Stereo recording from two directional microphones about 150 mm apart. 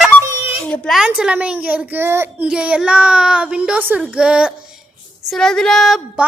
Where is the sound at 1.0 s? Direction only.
5° right (ahead or behind).